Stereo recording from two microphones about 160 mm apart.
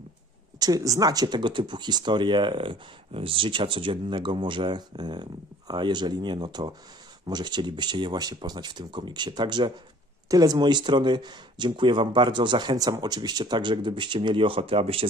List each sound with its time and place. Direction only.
0.6 s speech: 20° right (ahead or behind)